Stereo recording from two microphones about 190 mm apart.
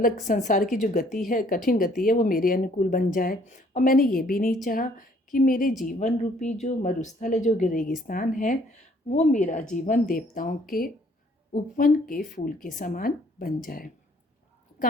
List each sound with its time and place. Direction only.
0.0 s speech: 40° left (ahead or behind)